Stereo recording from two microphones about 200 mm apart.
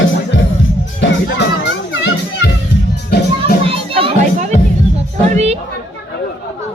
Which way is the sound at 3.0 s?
50° left (ahead or behind).